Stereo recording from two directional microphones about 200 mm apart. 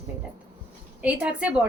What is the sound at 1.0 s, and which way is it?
Speech, 5° right (ahead or behind).